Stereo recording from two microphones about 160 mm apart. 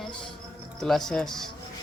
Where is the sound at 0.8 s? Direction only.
Centre (ahead or behind).